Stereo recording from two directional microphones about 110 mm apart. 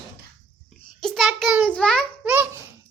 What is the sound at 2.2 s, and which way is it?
Babbling, 20° right (ahead or behind).